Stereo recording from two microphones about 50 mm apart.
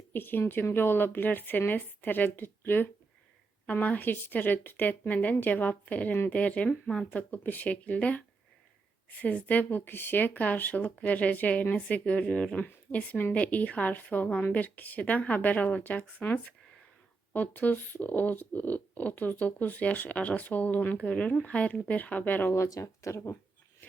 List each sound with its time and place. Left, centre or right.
0.1 s speech: left
3.7 s speech: left
6.8 s speech: centre
7.1 s speech: left
22.5 s speech: left